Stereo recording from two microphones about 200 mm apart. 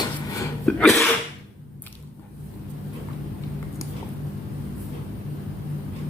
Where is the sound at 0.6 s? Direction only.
5° left (ahead or behind).